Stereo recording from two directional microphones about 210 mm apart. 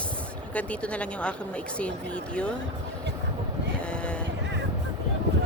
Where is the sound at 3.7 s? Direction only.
5° left (ahead or behind).